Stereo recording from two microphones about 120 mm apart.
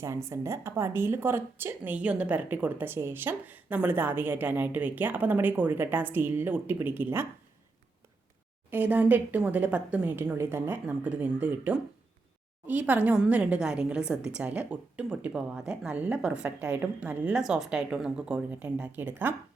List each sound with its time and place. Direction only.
0.0 s a woman's voice: 25° right (ahead or behind)
8.7 s a woman's voice: 15° right (ahead or behind)